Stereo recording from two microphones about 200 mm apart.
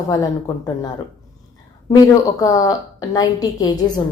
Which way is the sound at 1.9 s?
15° left (ahead or behind).